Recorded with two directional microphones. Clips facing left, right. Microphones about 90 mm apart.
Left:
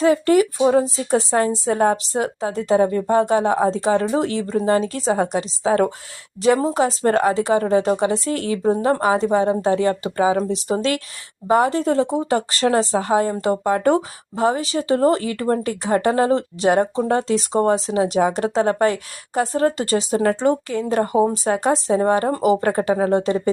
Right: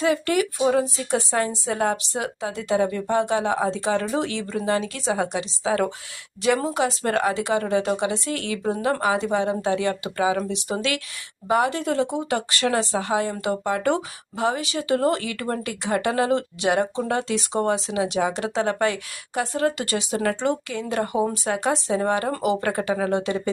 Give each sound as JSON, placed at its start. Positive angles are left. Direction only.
{"t": 0.0, "sound": "speech", "side_deg": 35}